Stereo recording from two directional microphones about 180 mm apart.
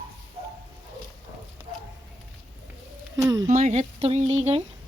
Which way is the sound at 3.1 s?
20° right (ahead or behind).